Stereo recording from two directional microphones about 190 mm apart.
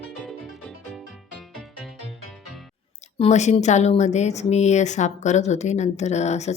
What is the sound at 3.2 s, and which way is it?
Speech, 35° left (ahead or behind).